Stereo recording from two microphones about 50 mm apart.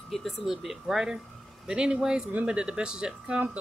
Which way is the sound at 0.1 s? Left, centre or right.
Centre.